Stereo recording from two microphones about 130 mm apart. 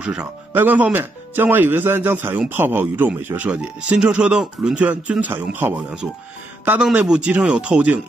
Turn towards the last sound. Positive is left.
turn(degrees=-10)  # may be behind; listen again after turning